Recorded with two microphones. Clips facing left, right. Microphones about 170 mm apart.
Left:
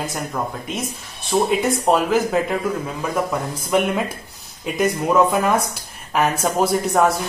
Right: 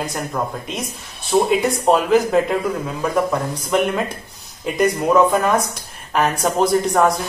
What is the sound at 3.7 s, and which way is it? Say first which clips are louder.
Speech: even; 5° left (ahead or behind).